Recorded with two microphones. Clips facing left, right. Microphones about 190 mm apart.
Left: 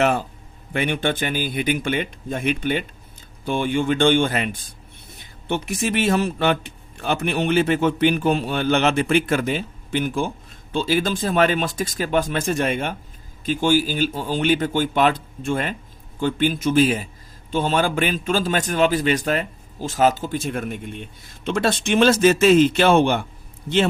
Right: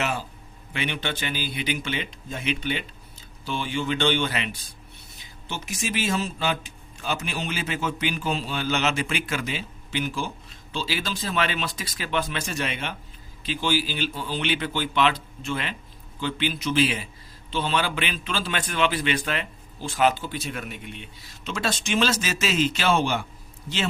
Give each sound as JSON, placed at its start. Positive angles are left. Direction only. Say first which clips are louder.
{"t": 0.0, "sound": "speech", "louder": "left 9 dB", "side_deg": 55}